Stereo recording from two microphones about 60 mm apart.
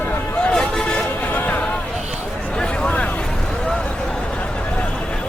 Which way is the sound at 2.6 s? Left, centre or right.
Centre.